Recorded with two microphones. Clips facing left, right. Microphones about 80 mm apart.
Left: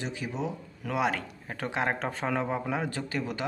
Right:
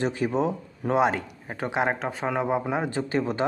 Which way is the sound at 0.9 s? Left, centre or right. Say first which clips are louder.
Right 5 dB; right.